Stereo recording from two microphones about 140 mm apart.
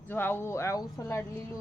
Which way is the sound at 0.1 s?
15° left (ahead or behind).